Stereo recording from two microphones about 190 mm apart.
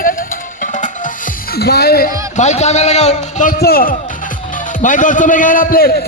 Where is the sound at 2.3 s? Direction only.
35° left (ahead or behind).